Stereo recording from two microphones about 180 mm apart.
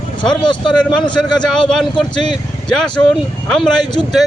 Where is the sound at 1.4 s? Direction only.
5° left (ahead or behind).